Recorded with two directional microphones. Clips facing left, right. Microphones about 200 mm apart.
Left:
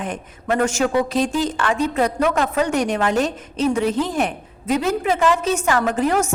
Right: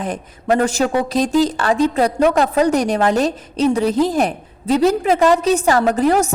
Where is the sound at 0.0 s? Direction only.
35° right (ahead or behind).